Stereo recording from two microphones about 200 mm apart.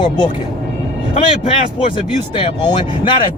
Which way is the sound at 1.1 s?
35° left (ahead or behind).